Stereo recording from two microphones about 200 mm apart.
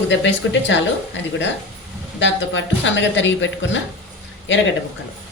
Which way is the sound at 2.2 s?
65° left (ahead or behind).